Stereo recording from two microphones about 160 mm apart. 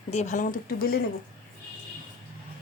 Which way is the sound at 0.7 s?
65° left (ahead or behind).